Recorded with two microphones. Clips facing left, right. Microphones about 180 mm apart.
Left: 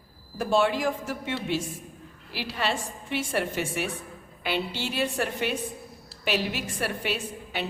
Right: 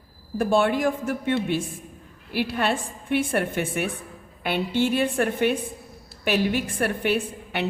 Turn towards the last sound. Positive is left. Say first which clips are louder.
# right 6 dB
turn(degrees=-60)  # may be behind; listen again after turning